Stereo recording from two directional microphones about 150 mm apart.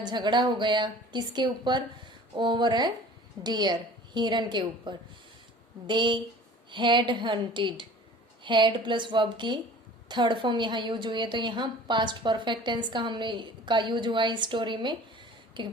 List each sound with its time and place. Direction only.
0.0 s a woman's voice: 30° right (ahead or behind)